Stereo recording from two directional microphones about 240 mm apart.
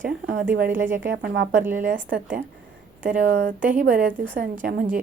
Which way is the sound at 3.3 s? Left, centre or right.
Right.